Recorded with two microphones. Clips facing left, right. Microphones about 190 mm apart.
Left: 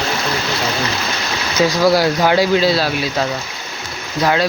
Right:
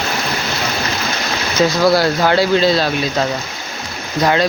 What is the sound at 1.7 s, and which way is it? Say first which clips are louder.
Speech: left 1 dB; 10° left (ahead or behind).